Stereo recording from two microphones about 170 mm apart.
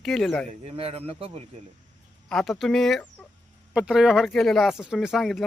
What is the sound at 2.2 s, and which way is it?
Speech, centre (ahead or behind).